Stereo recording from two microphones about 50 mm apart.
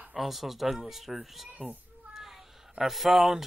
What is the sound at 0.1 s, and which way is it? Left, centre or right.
Speech, centre.